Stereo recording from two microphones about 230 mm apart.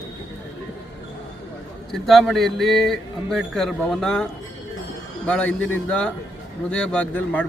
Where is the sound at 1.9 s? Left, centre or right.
Centre.